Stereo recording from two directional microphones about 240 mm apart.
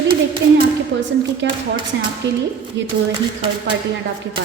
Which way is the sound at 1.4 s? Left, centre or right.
Right.